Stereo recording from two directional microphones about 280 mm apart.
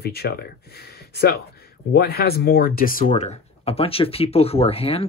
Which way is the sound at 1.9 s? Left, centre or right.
Left.